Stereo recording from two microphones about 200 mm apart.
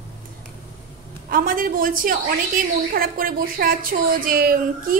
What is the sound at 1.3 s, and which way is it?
A woman's voice, 45° right (ahead or behind).